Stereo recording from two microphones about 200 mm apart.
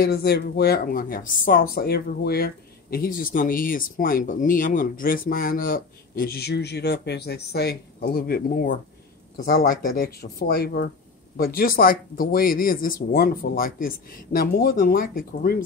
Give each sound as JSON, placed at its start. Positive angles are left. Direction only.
{"t": 0.0, "sound": "speech", "side_deg": 50}